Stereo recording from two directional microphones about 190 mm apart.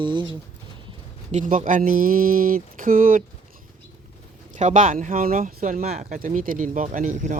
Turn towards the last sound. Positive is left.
turn(degrees=-40)  # may be behind; listen again after turning